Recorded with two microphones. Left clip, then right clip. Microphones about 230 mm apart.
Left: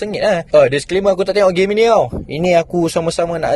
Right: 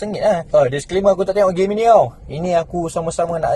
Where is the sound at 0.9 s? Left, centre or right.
Left.